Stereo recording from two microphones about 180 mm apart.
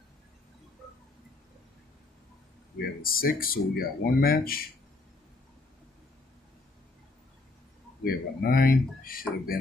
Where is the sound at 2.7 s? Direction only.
55° left (ahead or behind).